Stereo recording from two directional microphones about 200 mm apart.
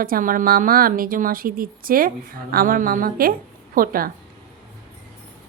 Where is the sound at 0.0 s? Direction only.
45° right (ahead or behind).